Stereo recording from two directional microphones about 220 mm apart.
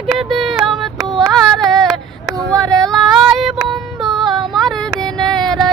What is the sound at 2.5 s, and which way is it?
Female singing, 15° right (ahead or behind).